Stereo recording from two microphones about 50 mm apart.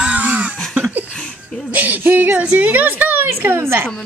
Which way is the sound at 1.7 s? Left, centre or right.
Right.